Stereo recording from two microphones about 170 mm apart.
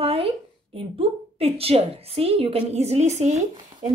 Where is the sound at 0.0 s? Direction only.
35° right (ahead or behind).